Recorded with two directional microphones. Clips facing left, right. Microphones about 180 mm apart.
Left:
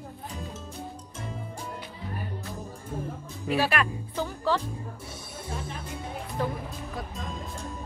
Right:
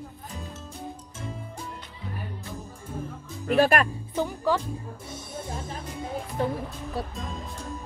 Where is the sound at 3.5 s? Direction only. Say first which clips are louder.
Right 5 dB; 50° right (ahead or behind).